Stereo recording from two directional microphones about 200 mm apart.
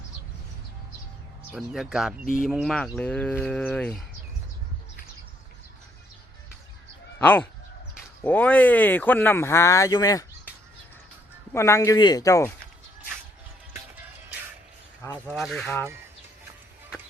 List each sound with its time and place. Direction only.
1.5 s speech: 5° right (ahead or behind)
2.2 s speech: 45° left (ahead or behind)
2.5 s speech: centre (ahead or behind)
7.2 s speech: 10° left (ahead or behind)
11.5 s speech: 15° left (ahead or behind)
15.0 s speech: 5° left (ahead or behind)